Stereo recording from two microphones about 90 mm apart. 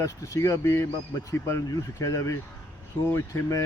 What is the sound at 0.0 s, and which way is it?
Speech, 35° left (ahead or behind).